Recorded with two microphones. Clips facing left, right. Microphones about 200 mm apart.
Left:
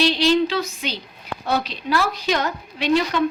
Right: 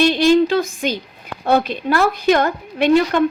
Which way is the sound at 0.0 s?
50° right (ahead or behind).